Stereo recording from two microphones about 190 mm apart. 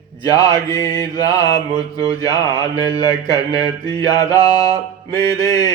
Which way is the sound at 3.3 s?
20° left (ahead or behind).